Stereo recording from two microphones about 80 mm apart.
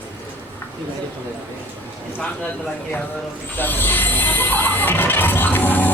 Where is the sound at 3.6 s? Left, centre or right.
Left.